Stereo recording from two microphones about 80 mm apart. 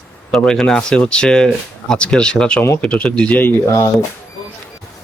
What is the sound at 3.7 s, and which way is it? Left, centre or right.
Speech, left.